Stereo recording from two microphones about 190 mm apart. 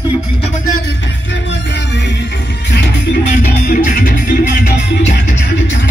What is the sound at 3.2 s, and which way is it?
Music, 50° left (ahead or behind).